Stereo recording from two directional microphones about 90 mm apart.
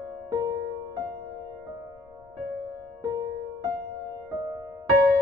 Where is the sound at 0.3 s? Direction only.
45° right (ahead or behind).